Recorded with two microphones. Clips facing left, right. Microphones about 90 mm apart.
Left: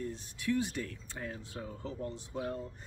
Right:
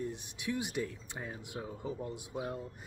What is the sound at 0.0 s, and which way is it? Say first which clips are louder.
Speech: left 1 dB; 15° right (ahead or behind).